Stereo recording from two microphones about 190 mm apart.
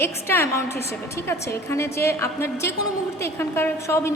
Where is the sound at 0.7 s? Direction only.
60° left (ahead or behind).